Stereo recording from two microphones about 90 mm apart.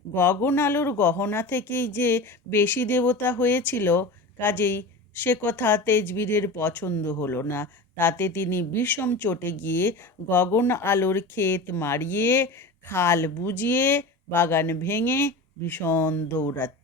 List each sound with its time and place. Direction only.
0.1 s speech: 25° left (ahead or behind)